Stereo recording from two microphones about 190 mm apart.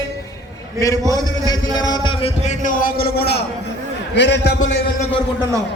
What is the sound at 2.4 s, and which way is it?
A man's voice, 45° left (ahead or behind).